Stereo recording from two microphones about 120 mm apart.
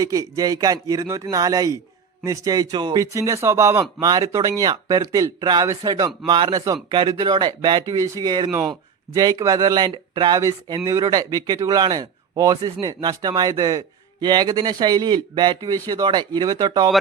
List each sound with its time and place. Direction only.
0.0 s a man's voice: 30° right (ahead or behind)